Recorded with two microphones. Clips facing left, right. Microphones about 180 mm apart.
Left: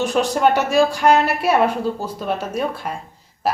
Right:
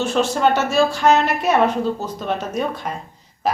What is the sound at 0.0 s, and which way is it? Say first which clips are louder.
A woman's voice: left 1 dB; 15° left (ahead or behind).